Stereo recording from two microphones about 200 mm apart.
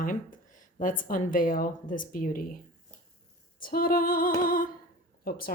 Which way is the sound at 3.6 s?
45° left (ahead or behind).